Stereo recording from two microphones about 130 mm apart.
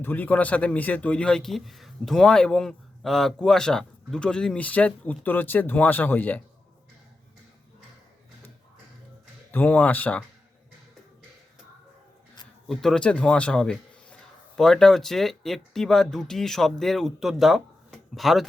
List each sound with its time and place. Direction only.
0.0 s a man's voice: 15° left (ahead or behind)
9.5 s a man's voice: 15° left (ahead or behind)
12.6 s a man's voice: centre (ahead or behind)